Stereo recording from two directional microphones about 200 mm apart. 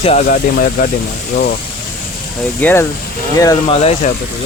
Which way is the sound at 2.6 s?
10° left (ahead or behind).